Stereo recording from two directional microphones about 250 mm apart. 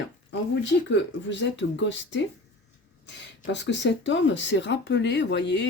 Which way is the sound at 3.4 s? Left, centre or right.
Left.